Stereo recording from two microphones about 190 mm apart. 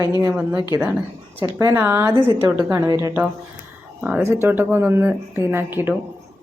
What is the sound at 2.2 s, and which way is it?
Speech, 25° left (ahead or behind).